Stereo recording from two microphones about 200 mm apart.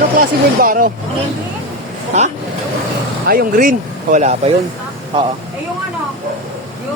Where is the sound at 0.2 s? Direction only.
45° right (ahead or behind).